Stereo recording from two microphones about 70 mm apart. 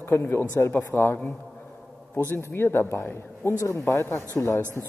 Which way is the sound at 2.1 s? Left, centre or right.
Left.